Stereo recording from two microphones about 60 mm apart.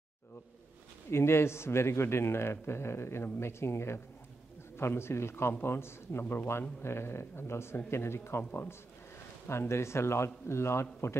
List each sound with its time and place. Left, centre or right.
1.1 s a man's voice: left
9.5 s a man's voice: left